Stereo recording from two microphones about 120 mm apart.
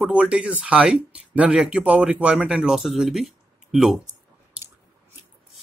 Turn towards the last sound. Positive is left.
turn(degrees=-5)  # may be behind; listen again after turning